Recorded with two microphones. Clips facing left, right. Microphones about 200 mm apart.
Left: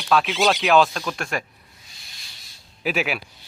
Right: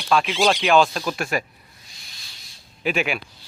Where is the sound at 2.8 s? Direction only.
5° left (ahead or behind).